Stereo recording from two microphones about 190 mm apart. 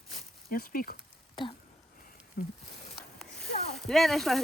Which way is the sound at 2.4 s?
50° left (ahead or behind).